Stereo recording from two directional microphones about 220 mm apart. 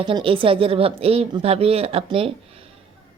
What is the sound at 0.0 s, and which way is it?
A man's voice, 25° right (ahead or behind).